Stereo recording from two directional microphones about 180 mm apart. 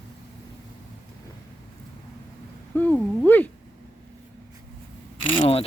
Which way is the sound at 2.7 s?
10° left (ahead or behind).